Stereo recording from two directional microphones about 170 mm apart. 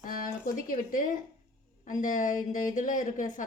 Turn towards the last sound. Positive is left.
turn(degrees=50)  # may be behind; listen again after turning